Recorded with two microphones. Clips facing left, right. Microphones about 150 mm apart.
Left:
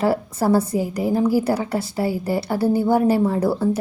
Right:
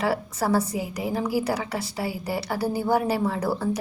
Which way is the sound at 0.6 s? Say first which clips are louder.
Left 7 dB; 55° left (ahead or behind).